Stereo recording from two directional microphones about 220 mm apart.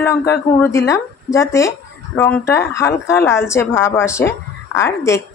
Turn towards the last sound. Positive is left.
turn(degrees=15)  # may be behind; listen again after turning